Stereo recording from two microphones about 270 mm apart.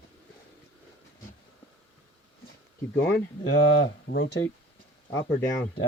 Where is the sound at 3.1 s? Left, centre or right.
Left.